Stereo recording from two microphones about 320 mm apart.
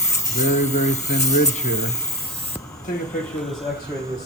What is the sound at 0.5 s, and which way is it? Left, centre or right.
Speech, left.